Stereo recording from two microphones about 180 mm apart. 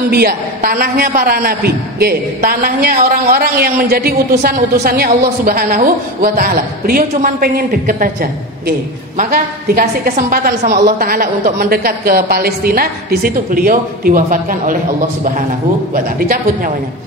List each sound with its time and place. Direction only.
0.1 s a woman's voice: 60° right (ahead or behind)